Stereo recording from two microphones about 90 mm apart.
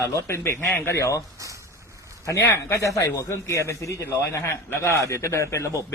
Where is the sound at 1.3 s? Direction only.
35° right (ahead or behind).